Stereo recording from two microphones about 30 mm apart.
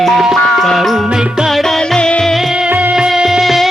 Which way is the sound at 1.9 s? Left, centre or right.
Left.